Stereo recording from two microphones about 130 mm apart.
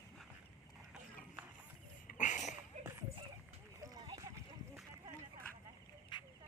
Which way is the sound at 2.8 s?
60° right (ahead or behind).